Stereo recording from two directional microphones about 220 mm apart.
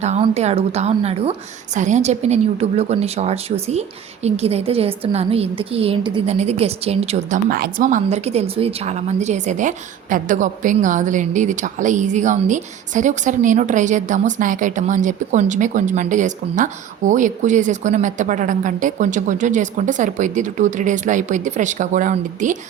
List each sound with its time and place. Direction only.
0.0 s a woman's voice: 30° right (ahead or behind)
7.5 s a woman's voice: 40° right (ahead or behind)